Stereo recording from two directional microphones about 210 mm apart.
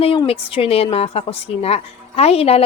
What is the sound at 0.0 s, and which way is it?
Speech, 25° left (ahead or behind).